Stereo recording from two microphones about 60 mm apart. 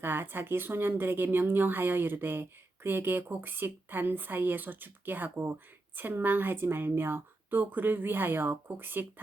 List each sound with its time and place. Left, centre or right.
0.0 s speech: right